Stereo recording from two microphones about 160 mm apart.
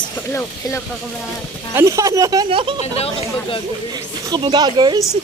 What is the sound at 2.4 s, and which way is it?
Speech, 35° right (ahead or behind).